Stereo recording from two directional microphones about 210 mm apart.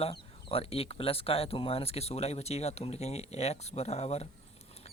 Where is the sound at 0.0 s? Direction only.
25° left (ahead or behind).